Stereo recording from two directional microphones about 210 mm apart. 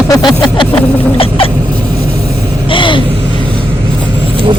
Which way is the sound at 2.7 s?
25° left (ahead or behind).